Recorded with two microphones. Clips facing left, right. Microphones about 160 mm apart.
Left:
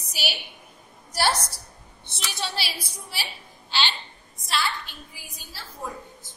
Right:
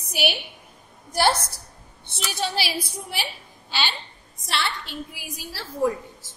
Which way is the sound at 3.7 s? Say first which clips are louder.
Even; 45° right (ahead or behind).